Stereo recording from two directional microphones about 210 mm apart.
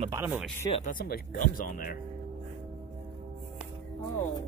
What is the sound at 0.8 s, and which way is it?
Speech, 45° left (ahead or behind).